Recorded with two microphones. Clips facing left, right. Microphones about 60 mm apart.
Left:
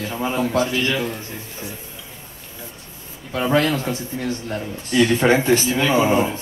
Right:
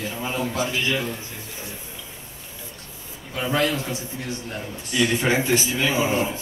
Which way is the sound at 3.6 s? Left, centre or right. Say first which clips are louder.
Left 3 dB; left.